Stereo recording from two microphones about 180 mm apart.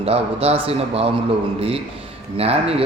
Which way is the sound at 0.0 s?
35° right (ahead or behind).